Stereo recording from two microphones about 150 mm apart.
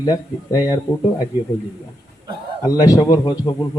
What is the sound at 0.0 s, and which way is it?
Speech, 25° left (ahead or behind).